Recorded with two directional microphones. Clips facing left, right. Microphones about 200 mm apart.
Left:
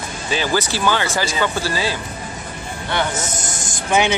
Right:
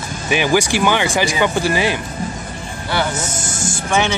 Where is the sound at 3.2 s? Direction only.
20° left (ahead or behind).